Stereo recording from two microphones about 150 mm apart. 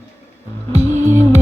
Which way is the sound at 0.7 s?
45° right (ahead or behind).